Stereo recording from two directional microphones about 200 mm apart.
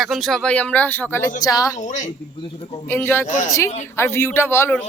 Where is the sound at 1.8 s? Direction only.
35° left (ahead or behind).